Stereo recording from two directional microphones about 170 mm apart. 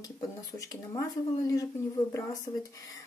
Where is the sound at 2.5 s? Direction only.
30° left (ahead or behind).